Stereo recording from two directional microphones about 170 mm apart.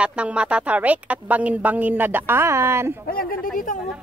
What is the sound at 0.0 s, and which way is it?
A woman's voice, 5° right (ahead or behind).